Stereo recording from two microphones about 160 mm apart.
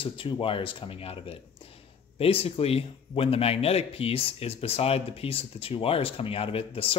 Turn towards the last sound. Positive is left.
turn(degrees=35)  # may be behind; listen again after turning